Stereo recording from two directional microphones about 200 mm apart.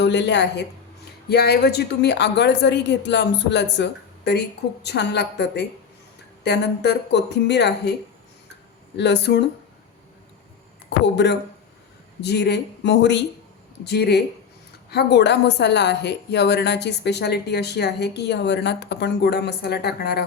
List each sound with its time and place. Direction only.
0.0 s a woman's voice: 60° left (ahead or behind)
9.0 s a woman's voice: 60° left (ahead or behind)
10.8 s a woman's voice: 60° left (ahead or behind)